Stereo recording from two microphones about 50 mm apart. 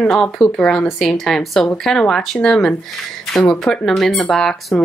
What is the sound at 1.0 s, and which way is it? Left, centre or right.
Speech, centre.